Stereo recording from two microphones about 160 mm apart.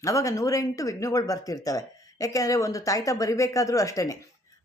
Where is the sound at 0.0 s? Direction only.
20° left (ahead or behind).